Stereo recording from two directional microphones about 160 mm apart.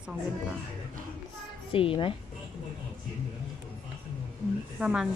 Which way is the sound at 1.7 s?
35° left (ahead or behind).